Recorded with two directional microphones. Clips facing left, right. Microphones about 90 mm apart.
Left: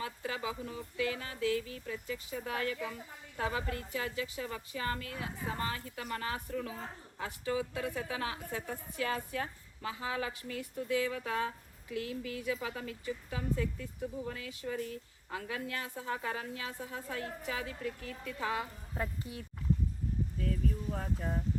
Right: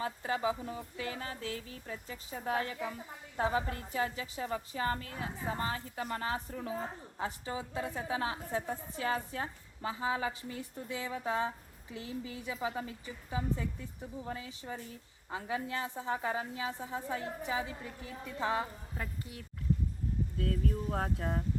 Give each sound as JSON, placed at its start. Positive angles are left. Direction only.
{"t": 0.0, "sound": "speech", "side_deg": -35}
{"t": 18.9, "sound": "speech", "side_deg": 25}
{"t": 20.9, "sound": "speech", "side_deg": -70}